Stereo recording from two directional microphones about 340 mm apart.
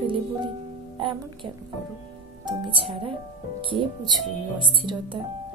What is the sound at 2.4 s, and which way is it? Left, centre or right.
Speech, centre.